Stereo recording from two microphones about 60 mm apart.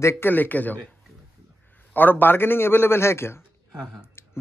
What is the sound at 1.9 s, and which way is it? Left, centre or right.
A man's voice, left.